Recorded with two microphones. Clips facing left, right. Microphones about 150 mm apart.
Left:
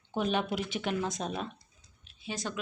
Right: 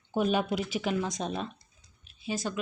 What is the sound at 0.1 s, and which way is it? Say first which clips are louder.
Speech: right 3 dB; 10° right (ahead or behind).